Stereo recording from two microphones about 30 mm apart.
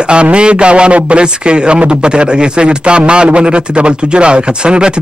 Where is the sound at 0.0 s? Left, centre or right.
Right.